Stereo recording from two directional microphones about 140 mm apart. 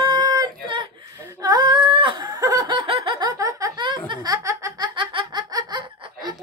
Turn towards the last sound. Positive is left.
turn(degrees=-30)  # may be behind; listen again after turning